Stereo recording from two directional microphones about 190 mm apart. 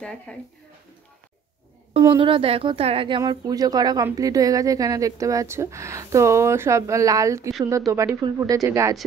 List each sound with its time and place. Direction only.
0.3 s speech: 5° left (ahead or behind)
2.0 s speech: 25° right (ahead or behind)